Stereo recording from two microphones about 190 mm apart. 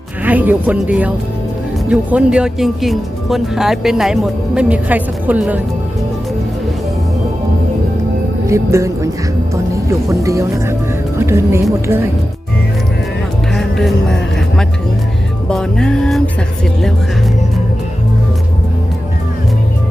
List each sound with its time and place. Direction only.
0.3 s speech: 10° right (ahead or behind)
8.4 s speech: 15° right (ahead or behind)
10.2 s speech: 15° right (ahead or behind)
13.5 s music: centre (ahead or behind)
15.4 s speech: 5° left (ahead or behind)